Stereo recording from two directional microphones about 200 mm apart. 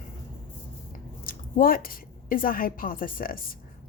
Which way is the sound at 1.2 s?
45° left (ahead or behind).